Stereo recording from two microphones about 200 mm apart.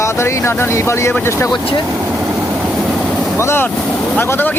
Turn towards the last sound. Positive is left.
turn(degrees=10)  # may be behind; listen again after turning